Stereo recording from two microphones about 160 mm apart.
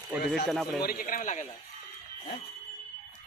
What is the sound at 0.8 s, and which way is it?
Speech, 65° left (ahead or behind).